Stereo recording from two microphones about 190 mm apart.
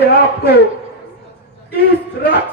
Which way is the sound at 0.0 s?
60° left (ahead or behind).